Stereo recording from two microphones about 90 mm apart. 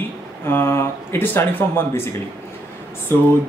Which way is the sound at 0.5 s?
25° left (ahead or behind).